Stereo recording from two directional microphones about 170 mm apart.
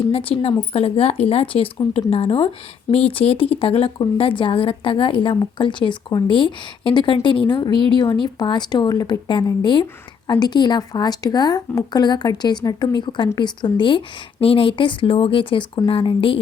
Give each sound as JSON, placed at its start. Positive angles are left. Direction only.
{"t": 0.1, "sound": "a woman's voice", "side_deg": 35}